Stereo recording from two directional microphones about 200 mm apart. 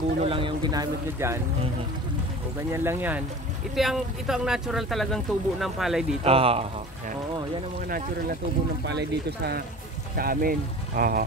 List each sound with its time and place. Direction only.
0.2 s speech: 25° right (ahead or behind)
2.7 s speech: 10° right (ahead or behind)
6.2 s speech: 30° right (ahead or behind)
8.8 s speech: 55° right (ahead or behind)